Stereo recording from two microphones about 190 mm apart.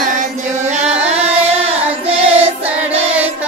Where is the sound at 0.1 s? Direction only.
40° right (ahead or behind).